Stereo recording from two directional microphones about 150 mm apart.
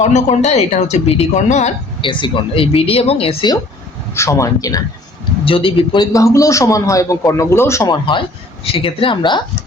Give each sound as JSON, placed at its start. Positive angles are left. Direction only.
{"t": 0.0, "sound": "speech", "side_deg": 50}
{"t": 2.0, "sound": "speech", "side_deg": 35}
{"t": 4.1, "sound": "a man's voice", "side_deg": 20}
{"t": 5.5, "sound": "a man's voice", "side_deg": 35}
{"t": 8.6, "sound": "speech", "side_deg": 40}